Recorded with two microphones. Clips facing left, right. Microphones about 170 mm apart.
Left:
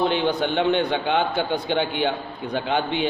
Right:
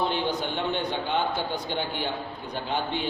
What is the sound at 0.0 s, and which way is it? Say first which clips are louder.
A man's voice: left 6 dB; 70° left (ahead or behind).